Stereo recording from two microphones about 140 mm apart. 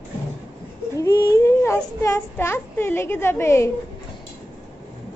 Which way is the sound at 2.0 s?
20° left (ahead or behind).